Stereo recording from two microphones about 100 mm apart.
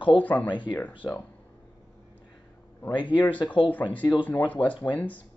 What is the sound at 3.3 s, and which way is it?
Speech, 60° left (ahead or behind).